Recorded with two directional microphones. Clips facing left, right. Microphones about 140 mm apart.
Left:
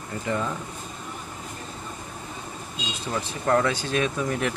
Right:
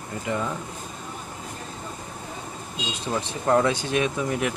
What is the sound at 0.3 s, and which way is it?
Speech, 10° right (ahead or behind).